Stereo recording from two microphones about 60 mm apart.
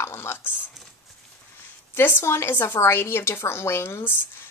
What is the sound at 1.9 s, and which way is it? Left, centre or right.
A woman's voice, left.